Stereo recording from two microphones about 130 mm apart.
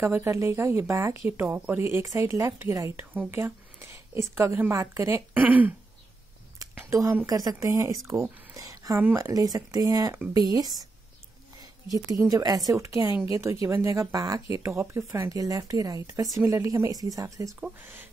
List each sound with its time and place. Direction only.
0.0 s a woman's voice: 20° right (ahead or behind)
6.6 s a sound: 25° right (ahead or behind)
7.2 s speech: 25° right (ahead or behind)
12.3 s speech: 30° right (ahead or behind)
17.6 s speech: 15° right (ahead or behind)